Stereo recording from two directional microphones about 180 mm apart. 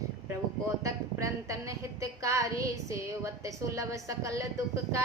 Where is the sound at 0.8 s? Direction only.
15° right (ahead or behind).